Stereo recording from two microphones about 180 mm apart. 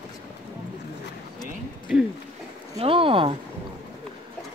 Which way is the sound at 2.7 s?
30° right (ahead or behind).